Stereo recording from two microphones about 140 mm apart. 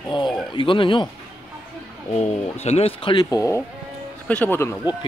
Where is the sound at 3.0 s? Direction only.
30° left (ahead or behind).